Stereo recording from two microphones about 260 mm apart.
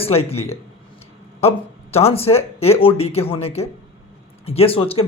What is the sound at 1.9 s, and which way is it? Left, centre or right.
Speech, left.